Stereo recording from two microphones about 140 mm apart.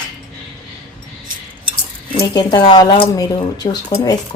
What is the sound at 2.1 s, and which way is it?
Speech, 35° left (ahead or behind).